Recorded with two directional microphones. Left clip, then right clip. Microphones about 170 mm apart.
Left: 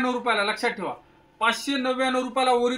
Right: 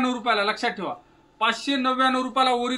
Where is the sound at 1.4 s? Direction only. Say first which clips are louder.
Even; 20° right (ahead or behind).